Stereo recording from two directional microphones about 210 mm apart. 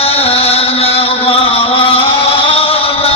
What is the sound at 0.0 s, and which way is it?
Chant, 30° left (ahead or behind).